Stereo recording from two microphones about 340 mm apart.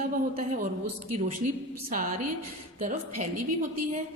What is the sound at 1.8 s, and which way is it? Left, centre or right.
Speech, right.